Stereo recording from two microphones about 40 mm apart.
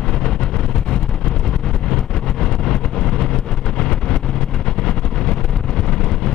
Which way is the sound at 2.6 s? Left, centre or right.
Centre.